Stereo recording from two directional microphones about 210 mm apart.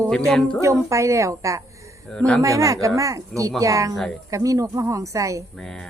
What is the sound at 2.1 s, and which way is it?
Speech, centre (ahead or behind).